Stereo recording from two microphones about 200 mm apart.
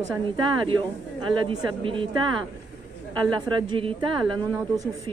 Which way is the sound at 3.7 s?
25° right (ahead or behind).